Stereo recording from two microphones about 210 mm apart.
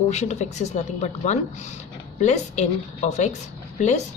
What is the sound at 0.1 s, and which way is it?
A woman's voice, 35° left (ahead or behind).